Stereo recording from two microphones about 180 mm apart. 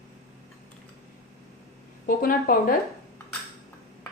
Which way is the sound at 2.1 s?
50° left (ahead or behind).